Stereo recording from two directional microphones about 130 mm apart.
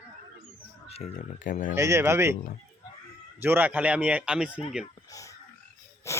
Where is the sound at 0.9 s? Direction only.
55° left (ahead or behind); by 1.7 s 90° left.